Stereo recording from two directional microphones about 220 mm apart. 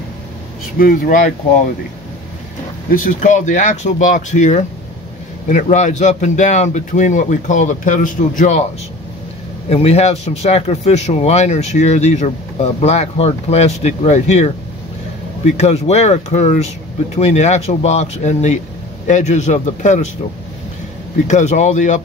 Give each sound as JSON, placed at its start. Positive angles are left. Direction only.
{"t": 0.7, "sound": "speech", "side_deg": 40}
{"t": 2.9, "sound": "speech", "side_deg": 35}
{"t": 9.7, "sound": "a man's voice", "side_deg": 30}
{"t": 15.5, "sound": "speech", "side_deg": 30}
{"t": 21.3, "sound": "speech", "side_deg": 30}